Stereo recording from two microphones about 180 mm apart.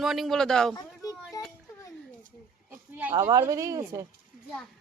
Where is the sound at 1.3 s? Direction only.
15° left (ahead or behind).